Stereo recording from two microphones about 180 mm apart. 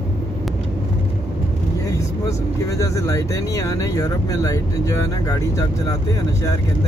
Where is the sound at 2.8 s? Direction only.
20° left (ahead or behind).